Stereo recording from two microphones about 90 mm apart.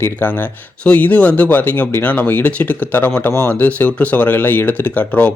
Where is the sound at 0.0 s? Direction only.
25° left (ahead or behind).